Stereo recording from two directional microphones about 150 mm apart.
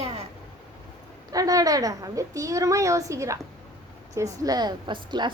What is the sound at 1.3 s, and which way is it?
A woman's voice, 25° right (ahead or behind).